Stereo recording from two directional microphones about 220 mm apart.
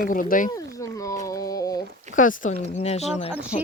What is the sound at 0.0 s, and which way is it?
Speech, 40° left (ahead or behind).